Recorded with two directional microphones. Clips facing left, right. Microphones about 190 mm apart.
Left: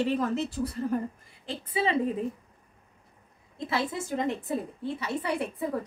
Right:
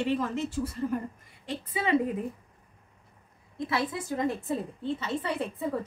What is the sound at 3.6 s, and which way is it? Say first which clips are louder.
A woman's voice: even; 25° left (ahead or behind).